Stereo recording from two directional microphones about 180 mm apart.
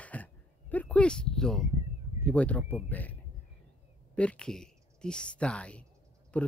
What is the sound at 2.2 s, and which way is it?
Speech, 5° left (ahead or behind).